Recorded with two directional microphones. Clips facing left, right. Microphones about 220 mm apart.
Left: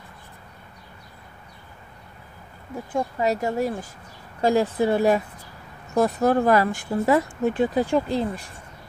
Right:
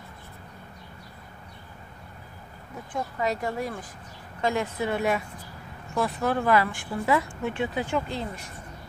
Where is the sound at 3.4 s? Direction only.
25° left (ahead or behind).